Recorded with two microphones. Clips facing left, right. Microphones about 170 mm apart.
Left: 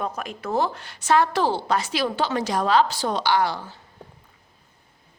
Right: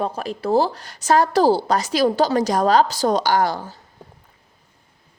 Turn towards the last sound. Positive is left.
turn(degrees=-45)  # may be behind; listen again after turning